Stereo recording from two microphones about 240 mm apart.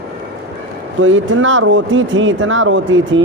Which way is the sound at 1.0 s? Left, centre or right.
Right.